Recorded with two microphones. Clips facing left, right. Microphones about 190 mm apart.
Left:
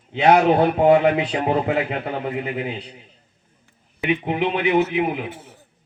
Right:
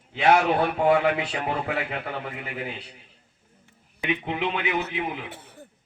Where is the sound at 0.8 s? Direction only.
20° left (ahead or behind).